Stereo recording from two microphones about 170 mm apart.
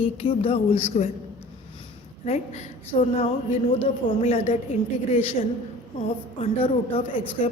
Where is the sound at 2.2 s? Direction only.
45° left (ahead or behind).